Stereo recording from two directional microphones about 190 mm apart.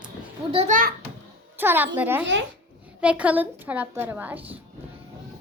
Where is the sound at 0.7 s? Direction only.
45° right (ahead or behind).